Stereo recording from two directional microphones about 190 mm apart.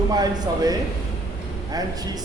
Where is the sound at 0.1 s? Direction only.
20° right (ahead or behind).